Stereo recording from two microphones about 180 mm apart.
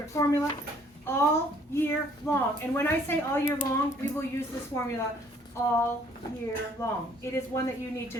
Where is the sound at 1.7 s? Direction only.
15° left (ahead or behind).